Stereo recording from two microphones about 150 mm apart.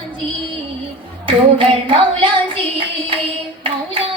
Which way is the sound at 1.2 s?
35° right (ahead or behind).